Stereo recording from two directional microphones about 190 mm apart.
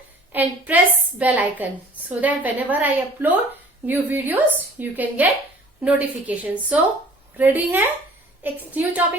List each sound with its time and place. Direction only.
0.3 s a woman's voice: 10° right (ahead or behind)